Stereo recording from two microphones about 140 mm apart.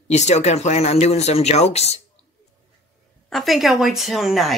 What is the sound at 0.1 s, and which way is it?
Speech, 55° left (ahead or behind).